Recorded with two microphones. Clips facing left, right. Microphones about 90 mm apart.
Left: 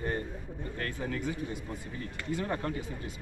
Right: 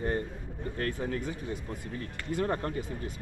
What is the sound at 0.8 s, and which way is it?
Speech, 35° right (ahead or behind).